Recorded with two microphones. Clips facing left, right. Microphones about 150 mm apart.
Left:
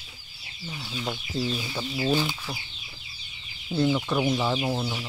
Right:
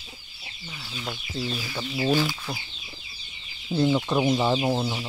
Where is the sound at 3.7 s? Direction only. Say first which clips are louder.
Right 2 dB; 20° right (ahead or behind).